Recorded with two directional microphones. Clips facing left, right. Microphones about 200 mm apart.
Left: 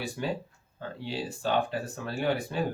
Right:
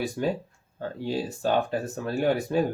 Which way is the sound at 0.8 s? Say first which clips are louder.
Right 6 dB; 45° right (ahead or behind).